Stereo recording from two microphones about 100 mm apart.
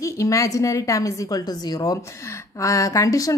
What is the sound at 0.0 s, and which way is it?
A woman's voice, 35° left (ahead or behind).